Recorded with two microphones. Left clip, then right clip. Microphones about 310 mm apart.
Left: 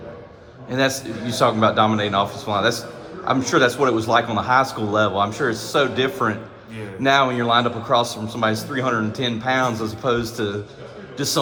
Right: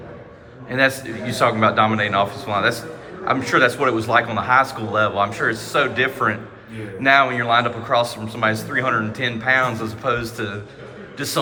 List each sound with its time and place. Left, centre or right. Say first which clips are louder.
0.7 s a man's voice: right 2 dB; centre